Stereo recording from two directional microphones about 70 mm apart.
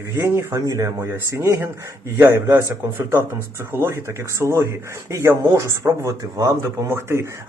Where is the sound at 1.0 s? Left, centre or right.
Right.